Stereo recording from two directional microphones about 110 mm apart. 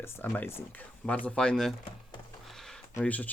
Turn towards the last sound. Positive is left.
turn(degrees=15)  # may be behind; listen again after turning